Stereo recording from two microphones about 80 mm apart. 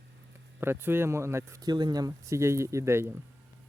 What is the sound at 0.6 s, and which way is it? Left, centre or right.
Speech, right.